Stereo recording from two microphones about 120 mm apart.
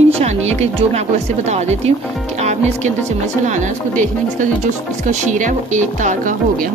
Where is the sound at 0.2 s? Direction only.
65° right (ahead or behind).